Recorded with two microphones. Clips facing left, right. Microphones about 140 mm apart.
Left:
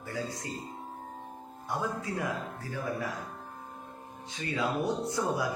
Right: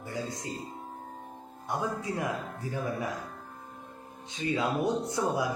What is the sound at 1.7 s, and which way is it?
A man's voice, 20° right (ahead or behind).